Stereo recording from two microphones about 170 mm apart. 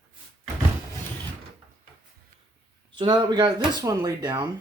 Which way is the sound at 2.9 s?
25° right (ahead or behind).